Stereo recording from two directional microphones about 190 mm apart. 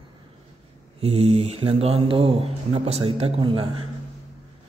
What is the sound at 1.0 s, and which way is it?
Speech, 35° right (ahead or behind).